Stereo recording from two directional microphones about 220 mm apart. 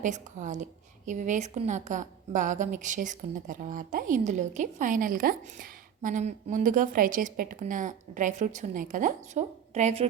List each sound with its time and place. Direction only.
0.0 s a woman's voice: 35° right (ahead or behind)